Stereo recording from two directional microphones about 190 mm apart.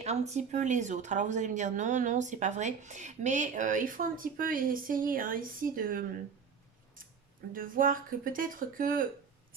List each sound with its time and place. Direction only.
0.0 s speech: 35° right (ahead or behind)
7.5 s speech: 45° right (ahead or behind)